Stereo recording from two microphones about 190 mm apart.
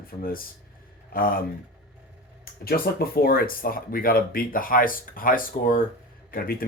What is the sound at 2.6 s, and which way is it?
Speech, 55° left (ahead or behind).